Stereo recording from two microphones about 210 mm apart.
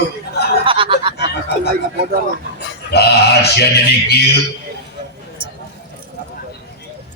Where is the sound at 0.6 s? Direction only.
25° right (ahead or behind).